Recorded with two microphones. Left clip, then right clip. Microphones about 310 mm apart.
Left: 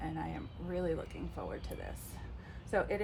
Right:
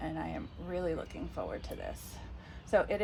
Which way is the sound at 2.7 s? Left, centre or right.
Right.